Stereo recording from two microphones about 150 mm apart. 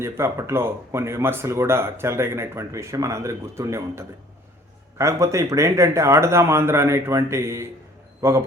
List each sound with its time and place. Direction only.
0.0 s speech: 20° right (ahead or behind)